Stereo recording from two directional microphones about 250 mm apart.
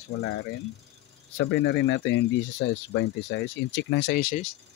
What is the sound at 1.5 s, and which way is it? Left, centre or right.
Speech, left.